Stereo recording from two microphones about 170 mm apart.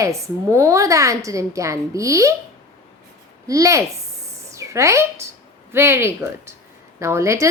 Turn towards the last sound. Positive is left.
turn(degrees=-15)  # may be behind; listen again after turning